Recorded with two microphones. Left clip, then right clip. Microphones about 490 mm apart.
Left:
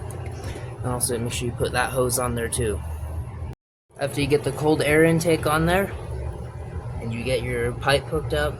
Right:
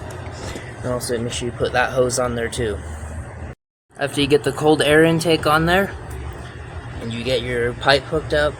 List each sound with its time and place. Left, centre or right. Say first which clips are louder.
0.9 s speech: right 3 dB; left
3.9 s speech: right 5 dB; left
7.3 s speech: right 4 dB; left